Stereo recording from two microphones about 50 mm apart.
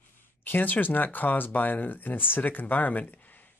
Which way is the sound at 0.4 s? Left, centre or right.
Left.